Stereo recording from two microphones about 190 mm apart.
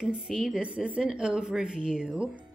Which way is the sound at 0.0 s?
5° right (ahead or behind).